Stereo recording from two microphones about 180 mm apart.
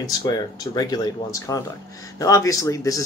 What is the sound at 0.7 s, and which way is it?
Speech, 20° left (ahead or behind).